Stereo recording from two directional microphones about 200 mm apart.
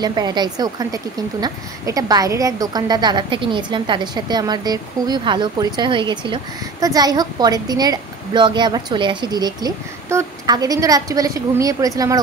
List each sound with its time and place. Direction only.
0.0 s a woman's voice: 20° right (ahead or behind)